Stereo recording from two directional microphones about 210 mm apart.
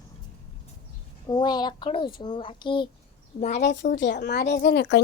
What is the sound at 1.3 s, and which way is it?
A woman's voice, 20° left (ahead or behind).